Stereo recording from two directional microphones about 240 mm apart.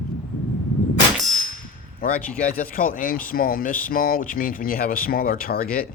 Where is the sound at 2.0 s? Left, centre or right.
Left.